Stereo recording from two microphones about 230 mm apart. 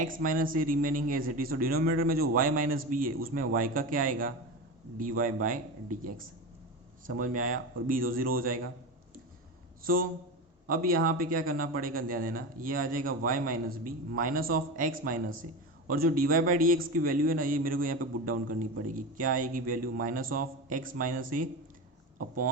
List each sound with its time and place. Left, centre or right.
0.3 s a man's voice: right
7.2 s a man's voice: right
9.8 s a man's voice: right